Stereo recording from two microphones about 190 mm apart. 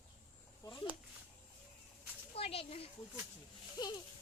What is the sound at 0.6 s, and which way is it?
Speech, 25° left (ahead or behind).